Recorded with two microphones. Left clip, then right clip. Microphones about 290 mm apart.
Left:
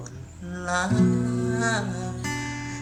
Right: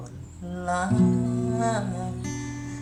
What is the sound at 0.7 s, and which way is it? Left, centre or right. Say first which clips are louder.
Music: left 1 dB; right.